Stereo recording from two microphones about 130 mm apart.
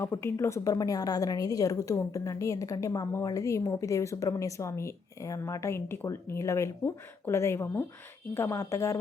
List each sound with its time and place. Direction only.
0.0 s a woman's voice: 20° left (ahead or behind)